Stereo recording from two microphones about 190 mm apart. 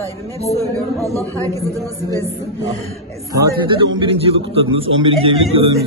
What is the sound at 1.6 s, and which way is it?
A man's voice, 15° right (ahead or behind).